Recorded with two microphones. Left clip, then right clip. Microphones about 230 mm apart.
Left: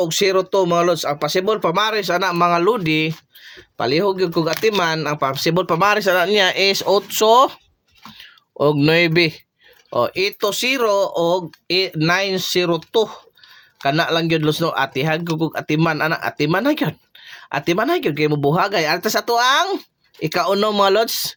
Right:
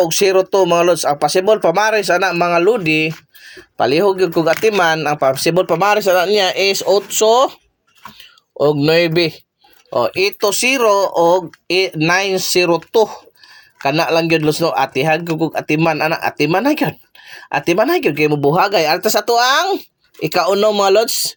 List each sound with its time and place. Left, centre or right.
0.0 s speech: centre